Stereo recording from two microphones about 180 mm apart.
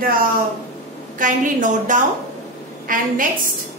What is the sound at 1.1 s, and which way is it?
A woman's voice, 45° right (ahead or behind).